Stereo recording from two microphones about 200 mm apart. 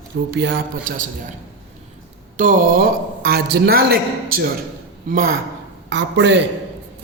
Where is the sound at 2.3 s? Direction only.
40° right (ahead or behind).